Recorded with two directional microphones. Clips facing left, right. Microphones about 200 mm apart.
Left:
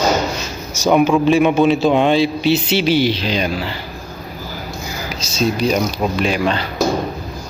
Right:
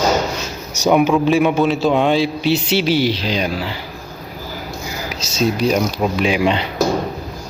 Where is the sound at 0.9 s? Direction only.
5° right (ahead or behind).